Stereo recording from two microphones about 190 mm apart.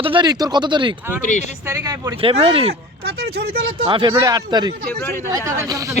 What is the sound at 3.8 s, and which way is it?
Speech, 25° right (ahead or behind).